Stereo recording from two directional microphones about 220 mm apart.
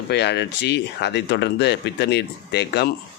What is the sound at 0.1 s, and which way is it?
Speech, 50° left (ahead or behind).